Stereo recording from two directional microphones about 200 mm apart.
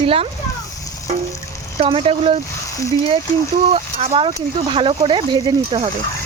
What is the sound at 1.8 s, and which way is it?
Speech, 30° right (ahead or behind).